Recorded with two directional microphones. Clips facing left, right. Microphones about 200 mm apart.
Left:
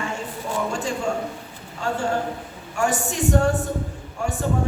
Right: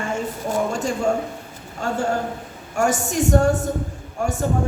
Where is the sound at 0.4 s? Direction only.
40° right (ahead or behind).